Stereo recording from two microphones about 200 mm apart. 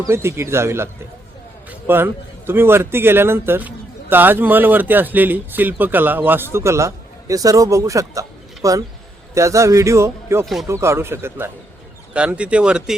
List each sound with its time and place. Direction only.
0.1 s speech: 10° right (ahead or behind)
1.9 s speech: 10° right (ahead or behind)
10.4 s speech: centre (ahead or behind)
10.7 s speech: 15° right (ahead or behind)